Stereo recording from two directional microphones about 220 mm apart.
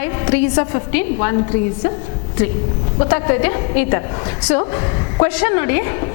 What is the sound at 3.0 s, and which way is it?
A woman's voice, 20° left (ahead or behind).